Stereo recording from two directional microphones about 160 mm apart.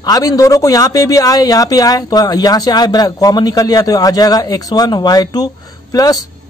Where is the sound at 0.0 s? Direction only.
25° left (ahead or behind).